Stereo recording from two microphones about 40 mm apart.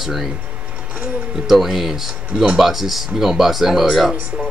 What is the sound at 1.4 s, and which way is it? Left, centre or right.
Speech, centre.